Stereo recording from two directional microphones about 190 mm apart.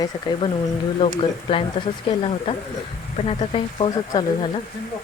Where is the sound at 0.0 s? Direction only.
25° left (ahead or behind).